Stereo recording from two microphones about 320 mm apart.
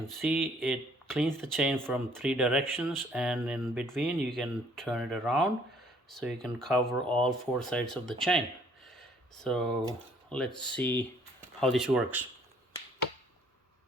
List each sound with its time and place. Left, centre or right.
0.0 s speech: centre
9.0 s a sound: centre
10.2 s speech: centre